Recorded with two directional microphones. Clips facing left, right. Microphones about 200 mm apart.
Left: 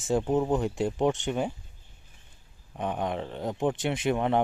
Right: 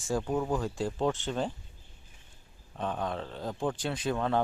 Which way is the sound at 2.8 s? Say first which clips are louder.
Left 3 dB; 20° left (ahead or behind).